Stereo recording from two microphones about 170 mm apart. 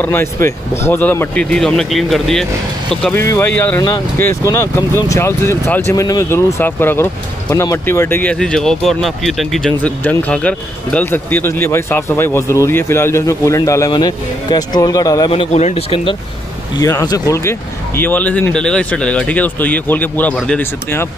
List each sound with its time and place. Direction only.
0.0 s speech: 15° left (ahead or behind)
3.2 s speech: 15° left (ahead or behind)
15.3 s speech: 40° left (ahead or behind)
16.8 s speech: 20° left (ahead or behind)